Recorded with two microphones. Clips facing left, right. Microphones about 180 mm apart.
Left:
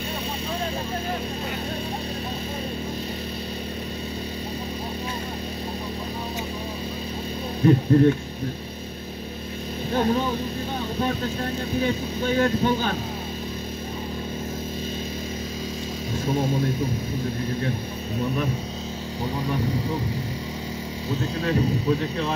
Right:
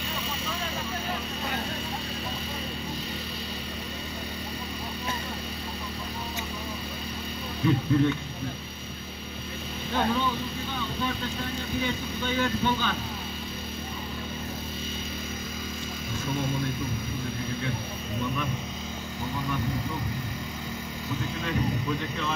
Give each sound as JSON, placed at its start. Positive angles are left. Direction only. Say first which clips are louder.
{"t": 7.6, "sound": "speech", "louder": "left 7 dB", "side_deg": 45}
{"t": 9.9, "sound": "speech", "louder": "left 4 dB", "side_deg": 40}
{"t": 11.8, "sound": "speech", "louder": "left 6 dB", "side_deg": 40}
{"t": 21.4, "sound": "speech", "louder": "left 6 dB", "side_deg": 35}